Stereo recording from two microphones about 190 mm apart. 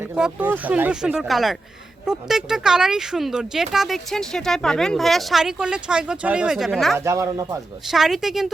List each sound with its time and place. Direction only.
0.0 s speech: 5° right (ahead or behind)
6.9 s speech: 15° right (ahead or behind)
7.9 s speech: centre (ahead or behind)